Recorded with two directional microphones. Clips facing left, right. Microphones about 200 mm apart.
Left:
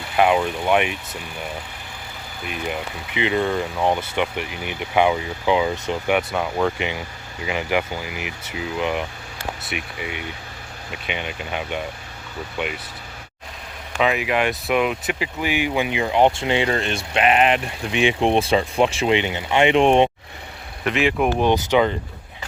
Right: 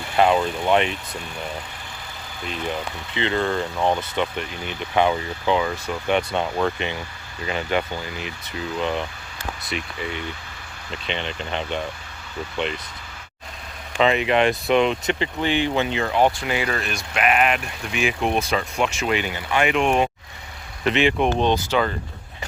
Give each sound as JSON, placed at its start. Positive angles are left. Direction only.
{"t": 0.2, "sound": "speech", "side_deg": 10}
{"t": 2.5, "sound": "speech", "side_deg": 15}
{"t": 6.1, "sound": "speech", "side_deg": 10}
{"t": 14.0, "sound": "speech", "side_deg": 5}
{"t": 20.9, "sound": "speech", "side_deg": 0}
{"t": 21.3, "sound": "speech", "side_deg": 15}